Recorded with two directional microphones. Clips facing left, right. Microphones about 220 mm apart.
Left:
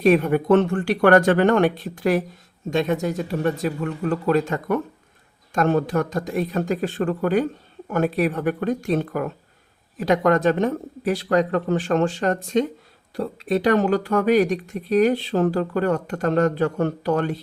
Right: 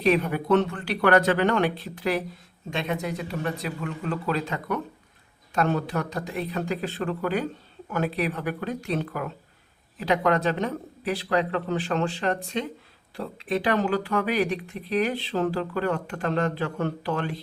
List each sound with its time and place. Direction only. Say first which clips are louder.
0.0 s speech: left 6 dB; 50° left (ahead or behind)